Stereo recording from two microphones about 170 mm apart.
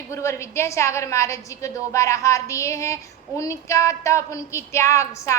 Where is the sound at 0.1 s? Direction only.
15° left (ahead or behind).